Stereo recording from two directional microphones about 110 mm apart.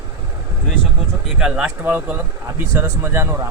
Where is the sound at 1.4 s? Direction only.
10° right (ahead or behind).